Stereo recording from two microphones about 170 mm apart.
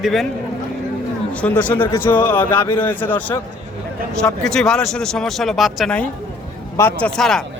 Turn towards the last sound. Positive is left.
turn(degrees=5)  # may be behind; listen again after turning